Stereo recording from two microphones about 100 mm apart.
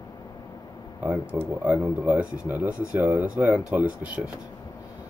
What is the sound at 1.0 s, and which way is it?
Speech, 15° right (ahead or behind).